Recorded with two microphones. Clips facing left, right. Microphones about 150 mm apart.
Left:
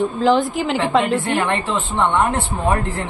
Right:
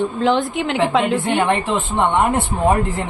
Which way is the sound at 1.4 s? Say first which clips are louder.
Right 3 dB; 20° right (ahead or behind).